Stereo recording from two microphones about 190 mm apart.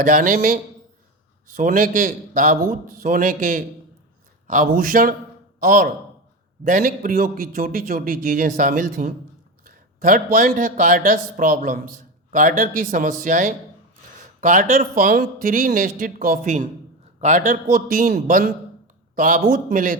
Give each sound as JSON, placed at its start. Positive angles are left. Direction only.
{"t": 0.0, "sound": "a man's voice", "side_deg": -45}